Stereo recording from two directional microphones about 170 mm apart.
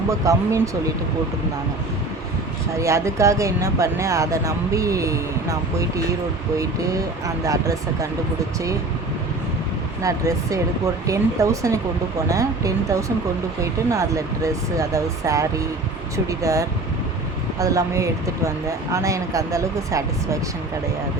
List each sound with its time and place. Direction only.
0.1 s speech: 20° right (ahead or behind)
2.7 s speech: 15° right (ahead or behind)
7.4 s speech: 20° right (ahead or behind)
10.0 s speech: 20° right (ahead or behind)